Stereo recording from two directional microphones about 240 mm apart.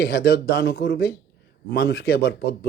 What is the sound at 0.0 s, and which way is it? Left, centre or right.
Speech, left.